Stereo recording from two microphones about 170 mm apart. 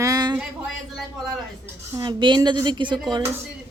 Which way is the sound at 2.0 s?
25° right (ahead or behind).